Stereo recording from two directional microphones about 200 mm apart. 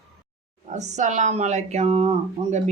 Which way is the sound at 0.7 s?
35° right (ahead or behind).